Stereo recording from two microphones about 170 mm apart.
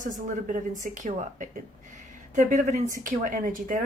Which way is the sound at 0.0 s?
50° right (ahead or behind).